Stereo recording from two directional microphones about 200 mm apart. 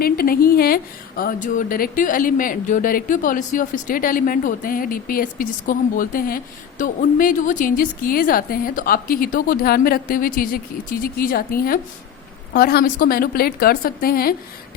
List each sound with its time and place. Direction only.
0.0 s a woman's voice: 45° left (ahead or behind)